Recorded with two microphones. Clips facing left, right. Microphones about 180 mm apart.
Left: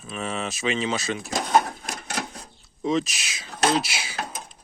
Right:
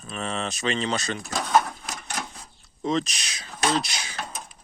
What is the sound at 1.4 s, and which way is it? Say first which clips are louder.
Drawer open or close: even; 30° left (ahead or behind).